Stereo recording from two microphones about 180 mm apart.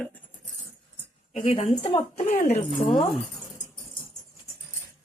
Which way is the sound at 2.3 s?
45° left (ahead or behind).